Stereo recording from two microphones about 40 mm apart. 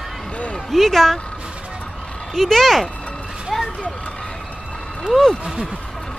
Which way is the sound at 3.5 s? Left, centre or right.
Centre.